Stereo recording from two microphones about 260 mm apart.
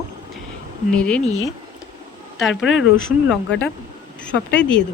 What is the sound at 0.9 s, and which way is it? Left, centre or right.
Speech, centre.